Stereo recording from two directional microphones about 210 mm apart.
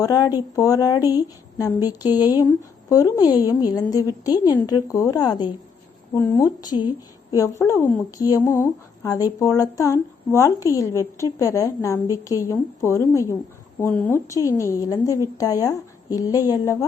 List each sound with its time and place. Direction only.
0.0 s speech: 15° left (ahead or behind)